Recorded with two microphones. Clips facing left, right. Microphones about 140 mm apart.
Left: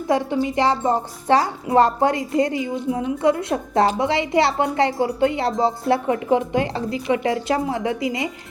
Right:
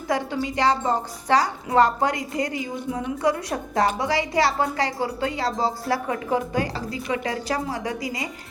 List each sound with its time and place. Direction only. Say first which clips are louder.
0.1 s a woman's voice: left 5 dB; 25° left (ahead or behind)